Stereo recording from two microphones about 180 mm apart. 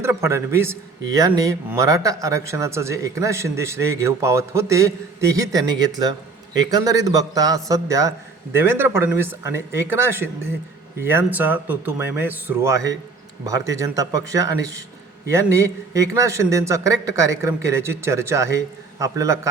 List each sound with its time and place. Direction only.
0.0 s a man's voice: 15° right (ahead or behind)